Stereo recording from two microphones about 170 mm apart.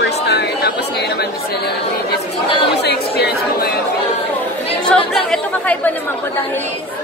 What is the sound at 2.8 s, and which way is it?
Speech, 70° left (ahead or behind).